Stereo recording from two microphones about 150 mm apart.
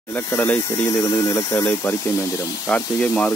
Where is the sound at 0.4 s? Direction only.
20° left (ahead or behind).